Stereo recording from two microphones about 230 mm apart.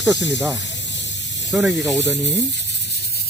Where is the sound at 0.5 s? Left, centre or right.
Left.